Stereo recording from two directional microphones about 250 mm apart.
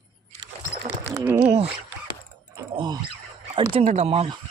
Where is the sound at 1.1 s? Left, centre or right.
Centre.